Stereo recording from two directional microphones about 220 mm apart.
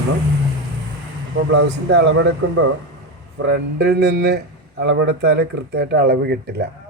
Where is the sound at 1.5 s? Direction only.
50° right (ahead or behind).